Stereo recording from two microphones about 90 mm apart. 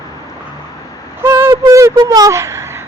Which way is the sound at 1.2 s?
30° right (ahead or behind).